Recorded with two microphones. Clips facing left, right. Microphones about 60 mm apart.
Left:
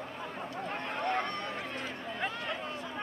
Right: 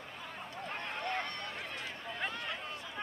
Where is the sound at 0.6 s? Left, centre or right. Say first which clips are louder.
Left 3 dB; centre.